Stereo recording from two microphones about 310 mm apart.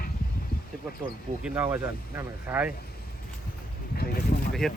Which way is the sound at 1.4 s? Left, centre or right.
Centre.